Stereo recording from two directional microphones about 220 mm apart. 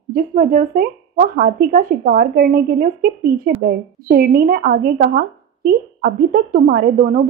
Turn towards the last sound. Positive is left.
turn(degrees=-40)  # may be behind; listen again after turning